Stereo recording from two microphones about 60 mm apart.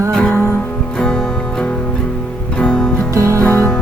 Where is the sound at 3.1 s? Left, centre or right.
Right.